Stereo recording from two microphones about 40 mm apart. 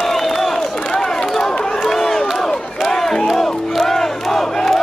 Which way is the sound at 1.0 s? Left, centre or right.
Centre.